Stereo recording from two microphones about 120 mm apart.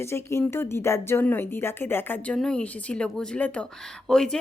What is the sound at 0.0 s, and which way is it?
A woman's voice, 20° left (ahead or behind).